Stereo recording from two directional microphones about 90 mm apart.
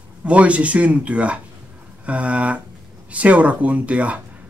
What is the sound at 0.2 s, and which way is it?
Speech, 15° right (ahead or behind).